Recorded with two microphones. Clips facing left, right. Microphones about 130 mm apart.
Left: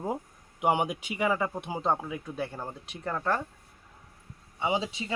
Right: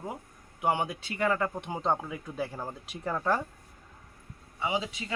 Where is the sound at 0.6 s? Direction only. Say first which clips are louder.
Left 2 dB; 15° left (ahead or behind); by 3.4 s 5° right (ahead or behind).